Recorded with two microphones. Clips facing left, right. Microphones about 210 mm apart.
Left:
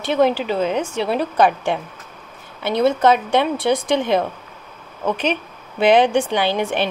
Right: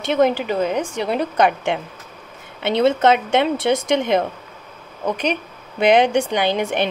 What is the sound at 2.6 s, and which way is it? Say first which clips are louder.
A woman's voice: even; 25° right (ahead or behind).